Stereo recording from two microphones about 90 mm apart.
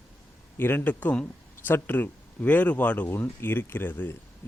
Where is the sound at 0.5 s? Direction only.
25° left (ahead or behind).